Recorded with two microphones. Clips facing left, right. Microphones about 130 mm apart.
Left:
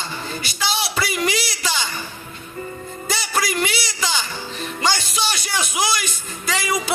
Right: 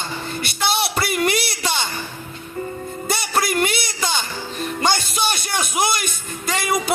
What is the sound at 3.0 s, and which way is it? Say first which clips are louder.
Music: right 2 dB; 55° right (ahead or behind).